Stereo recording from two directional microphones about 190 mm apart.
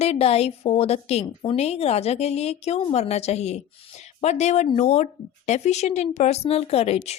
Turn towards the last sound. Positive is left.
turn(degrees=35)  # may be behind; listen again after turning